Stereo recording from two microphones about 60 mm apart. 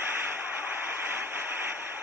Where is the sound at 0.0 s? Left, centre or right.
Right.